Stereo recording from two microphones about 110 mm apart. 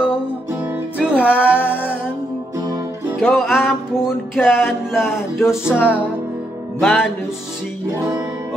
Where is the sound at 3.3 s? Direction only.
Centre (ahead or behind).